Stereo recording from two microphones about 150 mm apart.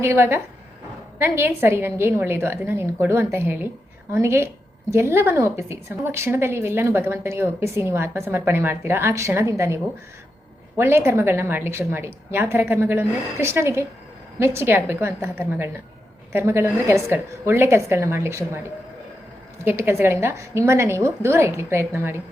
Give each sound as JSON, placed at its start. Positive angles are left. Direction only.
{"t": 0.0, "sound": "speech", "side_deg": -15}
{"t": 19.6, "sound": "speech", "side_deg": -15}